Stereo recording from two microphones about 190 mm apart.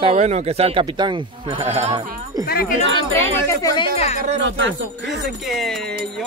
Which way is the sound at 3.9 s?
35° left (ahead or behind).